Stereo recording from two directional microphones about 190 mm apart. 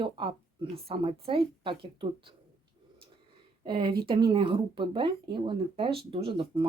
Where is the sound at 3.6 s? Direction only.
25° right (ahead or behind).